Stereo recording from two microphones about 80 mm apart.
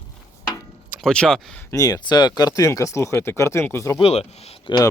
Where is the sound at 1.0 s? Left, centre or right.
Centre.